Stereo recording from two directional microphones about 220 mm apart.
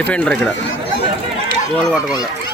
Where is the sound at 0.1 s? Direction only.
5° left (ahead or behind).